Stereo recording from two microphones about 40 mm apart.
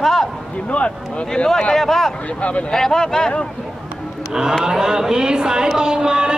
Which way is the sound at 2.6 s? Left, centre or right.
Centre.